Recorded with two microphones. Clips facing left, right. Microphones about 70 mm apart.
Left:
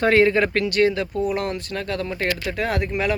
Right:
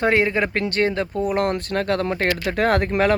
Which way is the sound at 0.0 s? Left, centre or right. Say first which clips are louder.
Left 2 dB; centre.